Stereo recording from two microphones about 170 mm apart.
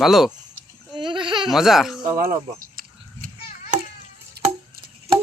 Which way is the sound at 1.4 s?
Centre (ahead or behind).